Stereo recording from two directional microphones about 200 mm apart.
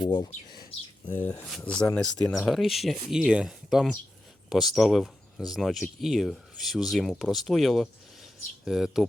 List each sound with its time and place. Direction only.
0.0 s speech: 20° left (ahead or behind)
1.4 s speech: 5° left (ahead or behind)